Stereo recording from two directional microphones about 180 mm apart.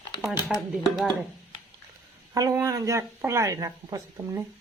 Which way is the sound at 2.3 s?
20° right (ahead or behind).